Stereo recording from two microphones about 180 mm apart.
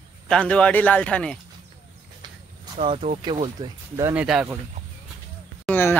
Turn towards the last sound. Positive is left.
turn(degrees=10)  # may be behind; listen again after turning